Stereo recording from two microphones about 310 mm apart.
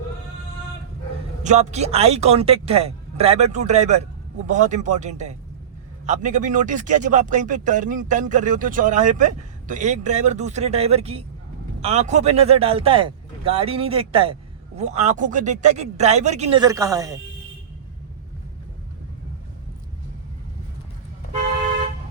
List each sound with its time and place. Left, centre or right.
1.5 s speech: right